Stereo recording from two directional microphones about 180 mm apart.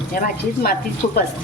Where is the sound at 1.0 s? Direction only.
40° left (ahead or behind).